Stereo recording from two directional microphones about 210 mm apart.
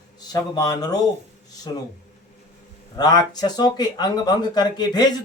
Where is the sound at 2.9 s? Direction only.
20° left (ahead or behind).